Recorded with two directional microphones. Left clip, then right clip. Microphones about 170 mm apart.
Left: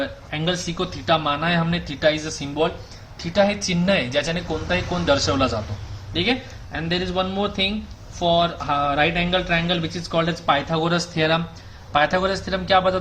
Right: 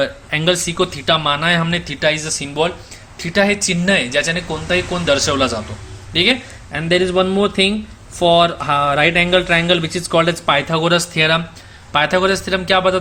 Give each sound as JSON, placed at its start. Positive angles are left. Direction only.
{"t": 0.0, "sound": "a man's voice", "side_deg": -40}
{"t": 6.7, "sound": "speech", "side_deg": -50}